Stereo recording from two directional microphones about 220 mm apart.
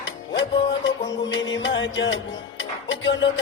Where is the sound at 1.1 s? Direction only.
55° left (ahead or behind).